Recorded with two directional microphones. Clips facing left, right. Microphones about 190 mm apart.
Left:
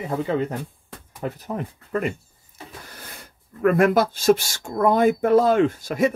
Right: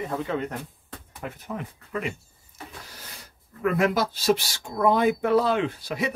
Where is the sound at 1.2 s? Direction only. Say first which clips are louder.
Left 6 dB; 40° left (ahead or behind).